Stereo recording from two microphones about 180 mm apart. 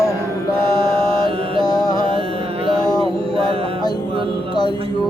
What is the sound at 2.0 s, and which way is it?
Music, 30° right (ahead or behind).